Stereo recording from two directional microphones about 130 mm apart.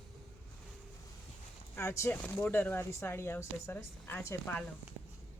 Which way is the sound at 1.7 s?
20° left (ahead or behind).